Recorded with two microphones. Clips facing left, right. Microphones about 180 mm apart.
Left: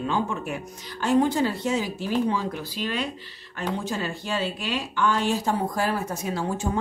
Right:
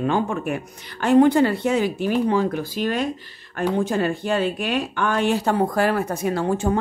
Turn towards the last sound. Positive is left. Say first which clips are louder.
# right 6 dB
turn(degrees=-60)  # may be behind; listen again after turning